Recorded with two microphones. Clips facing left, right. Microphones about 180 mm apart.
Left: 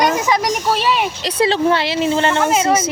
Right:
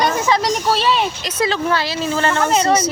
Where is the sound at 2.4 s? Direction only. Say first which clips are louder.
Even; 5° left (ahead or behind).